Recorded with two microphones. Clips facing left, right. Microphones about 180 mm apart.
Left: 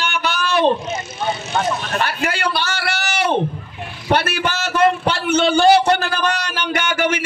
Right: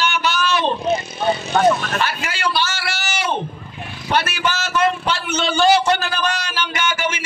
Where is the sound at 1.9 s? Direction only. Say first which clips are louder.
Left 2 dB; 60° left (ahead or behind).